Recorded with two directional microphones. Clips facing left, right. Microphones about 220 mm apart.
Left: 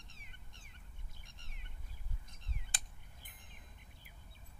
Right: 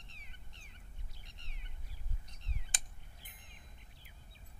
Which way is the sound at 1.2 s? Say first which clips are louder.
Right 1 dB; 50° left (ahead or behind).